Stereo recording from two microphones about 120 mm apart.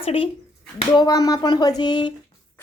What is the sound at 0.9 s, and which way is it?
Speech, 35° left (ahead or behind).